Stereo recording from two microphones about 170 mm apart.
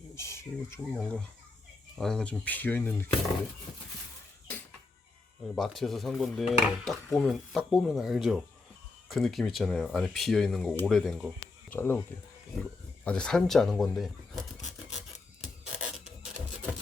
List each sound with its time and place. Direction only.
0.2 s speech: 15° left (ahead or behind)
2.0 s speech: 5° left (ahead or behind)
5.5 s speech: centre (ahead or behind)
11.7 s speech: 10° left (ahead or behind)
13.1 s a sound: 5° left (ahead or behind)